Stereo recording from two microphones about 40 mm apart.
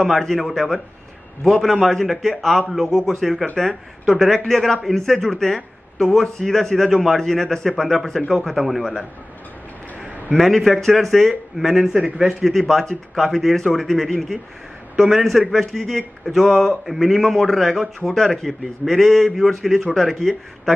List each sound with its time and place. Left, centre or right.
0.4 s a man's voice: centre
10.3 s a man's voice: centre
11.7 s speech: centre
12.4 s a man's voice: centre